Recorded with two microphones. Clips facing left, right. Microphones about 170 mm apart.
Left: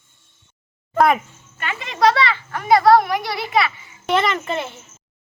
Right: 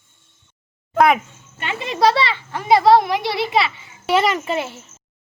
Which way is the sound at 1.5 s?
25° right (ahead or behind).